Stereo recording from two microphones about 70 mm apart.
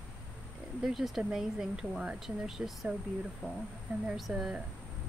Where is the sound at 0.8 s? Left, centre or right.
Centre.